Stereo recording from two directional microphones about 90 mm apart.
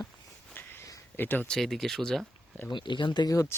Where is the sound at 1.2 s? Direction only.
20° left (ahead or behind).